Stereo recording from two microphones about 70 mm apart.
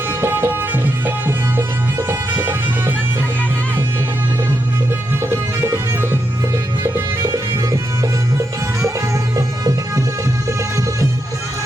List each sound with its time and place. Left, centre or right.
0.2 s music: right
5.2 s music: right
6.9 s music: right